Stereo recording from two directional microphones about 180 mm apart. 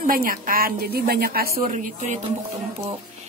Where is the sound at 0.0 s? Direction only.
50° right (ahead or behind).